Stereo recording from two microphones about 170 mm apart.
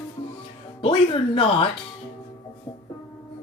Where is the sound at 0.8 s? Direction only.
30° left (ahead or behind).